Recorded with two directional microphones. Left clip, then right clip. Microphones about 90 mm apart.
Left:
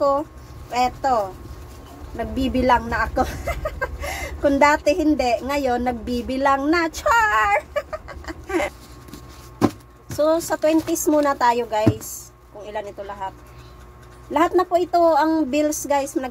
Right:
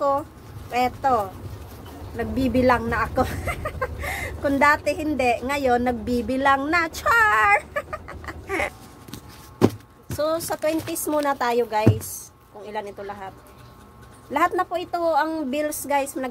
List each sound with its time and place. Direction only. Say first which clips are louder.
0.7 s a woman's voice: left 1 dB; centre (ahead or behind)
2.3 s speech: left 1 dB; centre (ahead or behind)
10.1 s a woman's voice: left 5 dB; 10° right (ahead or behind)
10.9 s speech: left 5 dB; 20° right (ahead or behind)
11.2 s a woman's voice: left 3 dB; 5° right (ahead or behind)
14.3 s a woman's voice: left 4 dB; centre (ahead or behind)